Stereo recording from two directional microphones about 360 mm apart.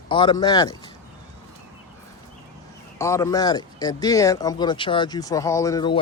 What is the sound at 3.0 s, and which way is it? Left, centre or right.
Speech, centre.